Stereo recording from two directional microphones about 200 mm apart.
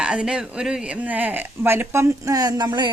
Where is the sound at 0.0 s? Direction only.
5° right (ahead or behind).